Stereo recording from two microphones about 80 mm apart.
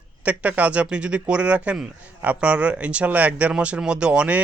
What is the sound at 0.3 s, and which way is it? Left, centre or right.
Speech, centre.